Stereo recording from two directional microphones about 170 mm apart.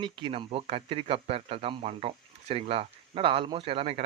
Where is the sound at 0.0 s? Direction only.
30° right (ahead or behind).